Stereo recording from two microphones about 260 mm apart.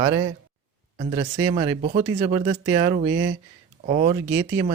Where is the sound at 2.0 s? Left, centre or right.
Centre.